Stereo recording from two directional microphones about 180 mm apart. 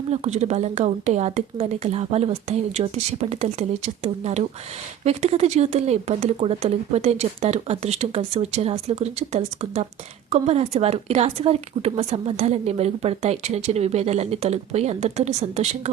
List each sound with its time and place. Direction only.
0.1 s a woman's voice: 40° right (ahead or behind)